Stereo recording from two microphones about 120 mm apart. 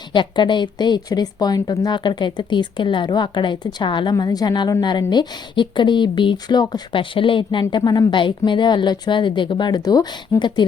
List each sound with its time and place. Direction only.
0.1 s speech: 40° left (ahead or behind)